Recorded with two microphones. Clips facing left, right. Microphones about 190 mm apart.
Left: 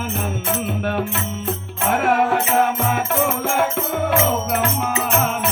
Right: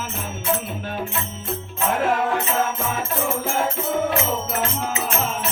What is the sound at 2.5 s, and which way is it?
Music, 65° left (ahead or behind).